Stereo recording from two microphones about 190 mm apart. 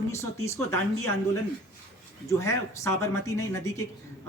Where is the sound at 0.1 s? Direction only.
15° left (ahead or behind).